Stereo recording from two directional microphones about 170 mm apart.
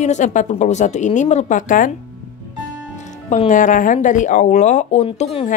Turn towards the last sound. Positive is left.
turn(degrees=40)  # may be behind; listen again after turning